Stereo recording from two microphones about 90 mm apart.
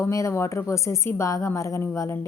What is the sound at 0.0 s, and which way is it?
A woman's voice, 35° left (ahead or behind).